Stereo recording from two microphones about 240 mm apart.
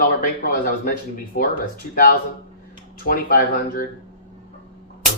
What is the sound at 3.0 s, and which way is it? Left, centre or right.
Speech, left.